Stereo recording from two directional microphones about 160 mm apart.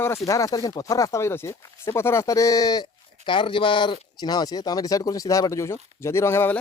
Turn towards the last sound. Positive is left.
turn(degrees=15)  # may be behind; listen again after turning